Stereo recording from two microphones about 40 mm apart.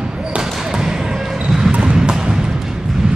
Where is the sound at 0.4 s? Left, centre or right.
Centre.